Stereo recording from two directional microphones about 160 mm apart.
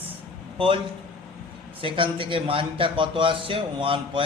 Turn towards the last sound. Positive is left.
turn(degrees=-35)  # may be behind; listen again after turning